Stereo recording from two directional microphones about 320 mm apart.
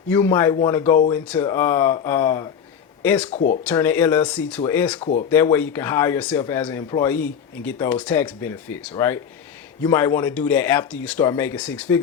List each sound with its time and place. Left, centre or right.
0.1 s speech: centre
3.2 s speech: left
3.6 s speech: centre